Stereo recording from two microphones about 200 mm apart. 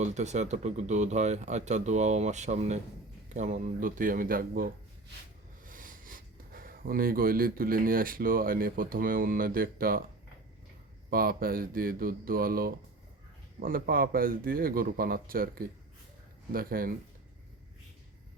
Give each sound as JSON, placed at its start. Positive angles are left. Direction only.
{"t": 0.0, "sound": "speech", "side_deg": -35}
{"t": 11.1, "sound": "speech", "side_deg": -45}